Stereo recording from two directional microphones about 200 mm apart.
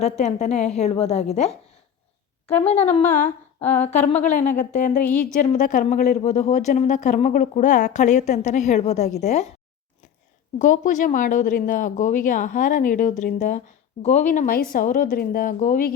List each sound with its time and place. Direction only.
0.0 s a woman's voice: 35° left (ahead or behind)
2.6 s a woman's voice: 30° left (ahead or behind)
10.6 s a woman's voice: 40° left (ahead or behind)